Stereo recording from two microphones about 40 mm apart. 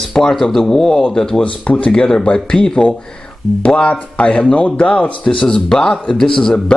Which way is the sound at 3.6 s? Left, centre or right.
Left.